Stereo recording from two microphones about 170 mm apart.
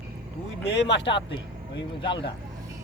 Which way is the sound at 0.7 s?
90° left.